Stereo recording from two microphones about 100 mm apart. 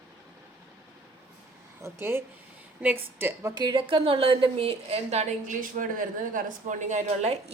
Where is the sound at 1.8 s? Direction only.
25° right (ahead or behind).